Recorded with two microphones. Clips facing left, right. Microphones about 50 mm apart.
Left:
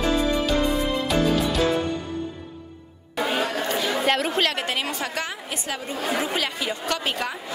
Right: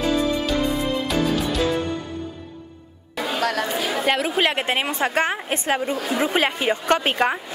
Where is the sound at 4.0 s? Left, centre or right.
Centre.